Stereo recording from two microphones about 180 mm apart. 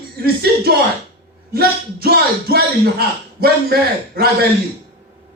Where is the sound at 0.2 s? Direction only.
60° right (ahead or behind).